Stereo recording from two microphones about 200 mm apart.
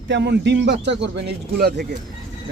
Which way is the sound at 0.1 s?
60° right (ahead or behind).